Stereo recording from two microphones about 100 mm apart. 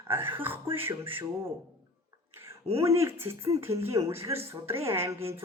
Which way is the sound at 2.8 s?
30° right (ahead or behind).